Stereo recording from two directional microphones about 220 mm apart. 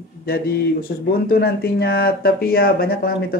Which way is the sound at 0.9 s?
45° left (ahead or behind).